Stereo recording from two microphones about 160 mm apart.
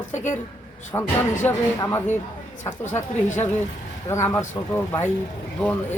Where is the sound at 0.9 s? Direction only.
20° left (ahead or behind).